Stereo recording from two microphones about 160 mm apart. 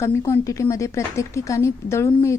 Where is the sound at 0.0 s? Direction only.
20° left (ahead or behind).